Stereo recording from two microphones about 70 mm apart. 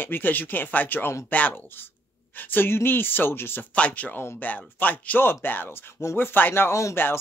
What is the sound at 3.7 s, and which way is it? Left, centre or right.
A man's voice, centre.